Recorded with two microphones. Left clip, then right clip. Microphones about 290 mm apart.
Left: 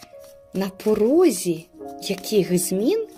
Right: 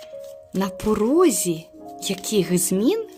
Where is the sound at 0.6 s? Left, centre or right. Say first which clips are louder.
Left 2 dB; right.